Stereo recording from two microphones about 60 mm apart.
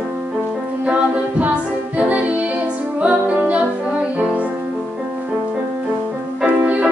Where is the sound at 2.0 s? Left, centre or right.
Right.